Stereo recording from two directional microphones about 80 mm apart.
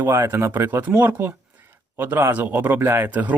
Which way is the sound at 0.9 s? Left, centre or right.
Right.